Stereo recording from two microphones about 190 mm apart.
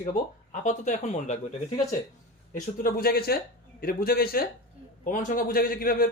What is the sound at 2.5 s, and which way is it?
Speech, 45° left (ahead or behind).